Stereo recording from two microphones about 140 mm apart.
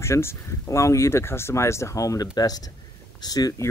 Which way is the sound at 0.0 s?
20° left (ahead or behind).